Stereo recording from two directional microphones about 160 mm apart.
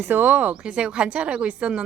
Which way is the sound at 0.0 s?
10° right (ahead or behind).